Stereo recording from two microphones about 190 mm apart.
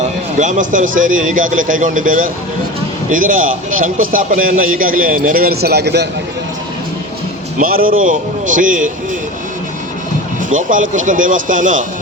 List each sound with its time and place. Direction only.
0.0 s a man's voice: 40° right (ahead or behind); by 6.1 s 60° right (ahead or behind)
7.6 s a man's voice: 50° right (ahead or behind)
10.5 s a man's voice: 45° right (ahead or behind)